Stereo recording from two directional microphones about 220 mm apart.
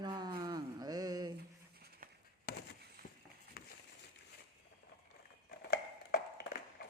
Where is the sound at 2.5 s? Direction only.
50° left (ahead or behind).